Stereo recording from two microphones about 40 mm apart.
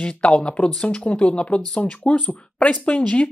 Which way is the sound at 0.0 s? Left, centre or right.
Left.